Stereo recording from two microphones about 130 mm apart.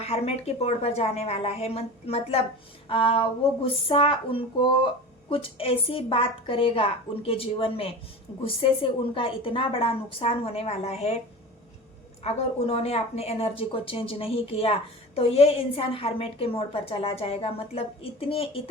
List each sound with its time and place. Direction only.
0.0 s a woman's voice: 50° left (ahead or behind)
12.2 s a woman's voice: 50° left (ahead or behind)